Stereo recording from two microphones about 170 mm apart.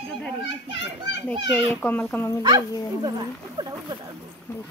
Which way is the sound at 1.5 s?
10° left (ahead or behind).